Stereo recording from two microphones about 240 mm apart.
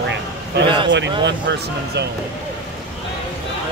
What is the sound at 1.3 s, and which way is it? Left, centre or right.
Speech, right.